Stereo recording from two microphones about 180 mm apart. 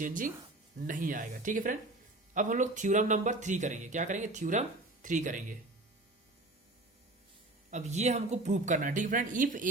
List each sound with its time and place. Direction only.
0.0 s speech: 45° right (ahead or behind)
7.7 s speech: 40° right (ahead or behind)